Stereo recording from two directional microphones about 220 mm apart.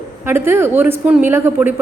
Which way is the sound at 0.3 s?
10° right (ahead or behind).